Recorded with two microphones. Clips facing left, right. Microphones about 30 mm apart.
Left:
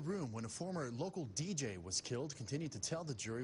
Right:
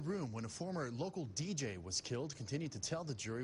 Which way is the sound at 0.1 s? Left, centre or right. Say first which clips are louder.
Right 1 dB; centre.